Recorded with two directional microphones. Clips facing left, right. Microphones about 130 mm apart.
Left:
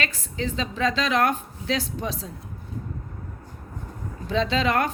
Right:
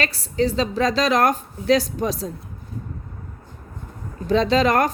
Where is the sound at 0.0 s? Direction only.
35° right (ahead or behind).